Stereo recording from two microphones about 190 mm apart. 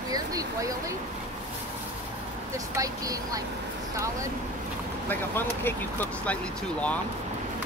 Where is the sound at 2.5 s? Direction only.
15° right (ahead or behind).